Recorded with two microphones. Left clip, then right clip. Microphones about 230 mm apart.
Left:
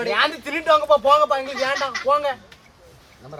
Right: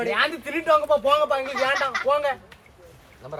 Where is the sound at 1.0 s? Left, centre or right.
Centre.